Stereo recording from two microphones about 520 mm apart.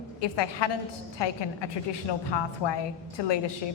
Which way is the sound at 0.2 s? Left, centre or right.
Left.